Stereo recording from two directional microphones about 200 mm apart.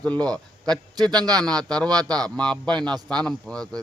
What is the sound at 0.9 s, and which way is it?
Speech, 20° right (ahead or behind).